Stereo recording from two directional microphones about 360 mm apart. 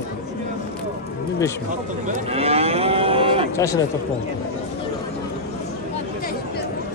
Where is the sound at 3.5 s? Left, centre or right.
Centre.